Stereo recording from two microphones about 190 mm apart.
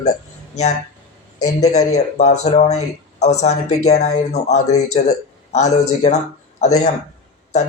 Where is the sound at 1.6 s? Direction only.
35° left (ahead or behind).